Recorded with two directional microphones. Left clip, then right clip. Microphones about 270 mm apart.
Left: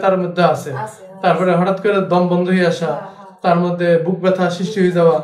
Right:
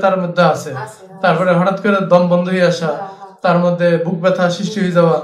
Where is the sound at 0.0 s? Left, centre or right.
Right.